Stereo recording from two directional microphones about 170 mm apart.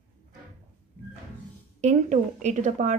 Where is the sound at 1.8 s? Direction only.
45° right (ahead or behind).